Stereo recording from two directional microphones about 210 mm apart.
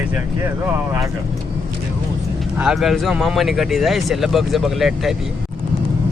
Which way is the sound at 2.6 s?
Centre (ahead or behind).